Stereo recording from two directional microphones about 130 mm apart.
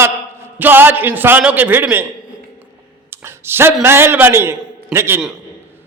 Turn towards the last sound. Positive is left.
turn(degrees=-20)  # may be behind; listen again after turning